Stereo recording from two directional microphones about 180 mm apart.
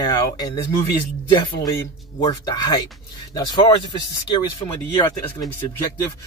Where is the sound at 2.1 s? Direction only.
20° left (ahead or behind).